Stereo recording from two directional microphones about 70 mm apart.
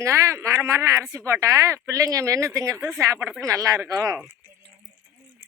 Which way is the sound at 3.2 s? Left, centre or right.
Right.